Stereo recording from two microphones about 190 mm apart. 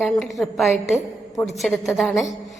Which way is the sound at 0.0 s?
Centre (ahead or behind).